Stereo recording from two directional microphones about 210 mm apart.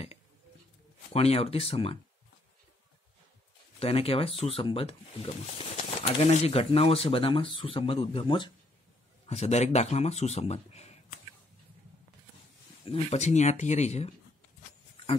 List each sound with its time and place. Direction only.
1.1 s speech: 30° left (ahead or behind)
3.8 s speech: 30° left (ahead or behind)
12.8 s speech: 30° left (ahead or behind)